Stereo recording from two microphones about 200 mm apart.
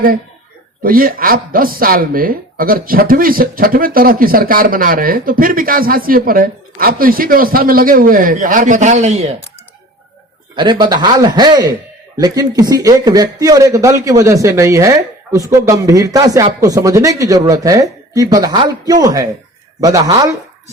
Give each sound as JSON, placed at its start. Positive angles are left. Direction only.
{"t": 0.8, "sound": "speech", "side_deg": -45}
{"t": 10.5, "sound": "a man's voice", "side_deg": -20}